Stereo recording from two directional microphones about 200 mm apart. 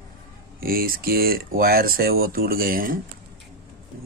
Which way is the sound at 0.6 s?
45° right (ahead or behind).